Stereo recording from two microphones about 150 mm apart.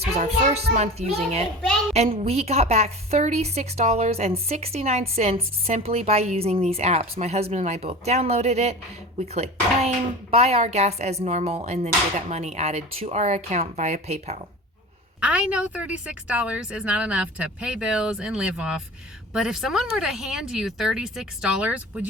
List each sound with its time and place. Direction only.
0.2 s a woman's voice: 50° right (ahead or behind)
15.2 s a woman's voice: 10° right (ahead or behind)